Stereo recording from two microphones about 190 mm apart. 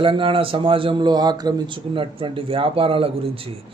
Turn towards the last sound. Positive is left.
turn(degrees=-30)  # may be behind; listen again after turning